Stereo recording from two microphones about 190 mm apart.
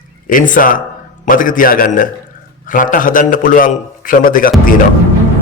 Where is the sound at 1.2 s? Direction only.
45° left (ahead or behind).